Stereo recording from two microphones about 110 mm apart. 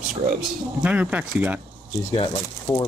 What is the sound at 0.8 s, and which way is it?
Speech, 15° right (ahead or behind).